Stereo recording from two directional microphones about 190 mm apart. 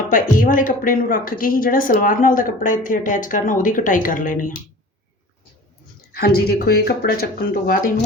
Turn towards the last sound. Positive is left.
turn(degrees=50)  # may be behind; listen again after turning